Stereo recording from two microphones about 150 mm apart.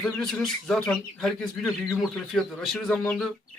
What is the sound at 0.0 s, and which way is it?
Speech, 5° left (ahead or behind).